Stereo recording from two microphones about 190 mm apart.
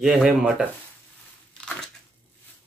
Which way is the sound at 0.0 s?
Centre (ahead or behind).